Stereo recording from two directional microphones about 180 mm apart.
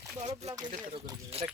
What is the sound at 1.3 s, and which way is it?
Speech, 35° right (ahead or behind).